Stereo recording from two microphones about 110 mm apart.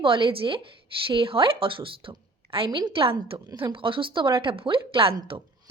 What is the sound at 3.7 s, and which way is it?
A woman's voice, 50° right (ahead or behind).